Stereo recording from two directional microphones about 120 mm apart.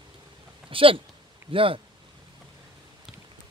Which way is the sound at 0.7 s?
50° right (ahead or behind).